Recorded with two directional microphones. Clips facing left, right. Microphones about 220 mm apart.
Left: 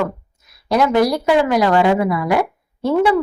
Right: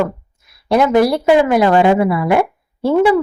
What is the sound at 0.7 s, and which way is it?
A woman's voice, 25° right (ahead or behind).